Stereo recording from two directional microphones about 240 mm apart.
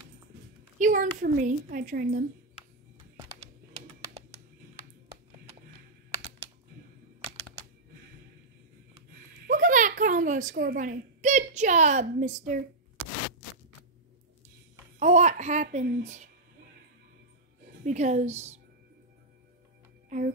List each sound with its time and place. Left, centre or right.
0.7 s a woman's voice: right
3.3 s typing: right
9.5 s a child's voice: right
15.0 s a child's voice: right
17.8 s a woman's voice: right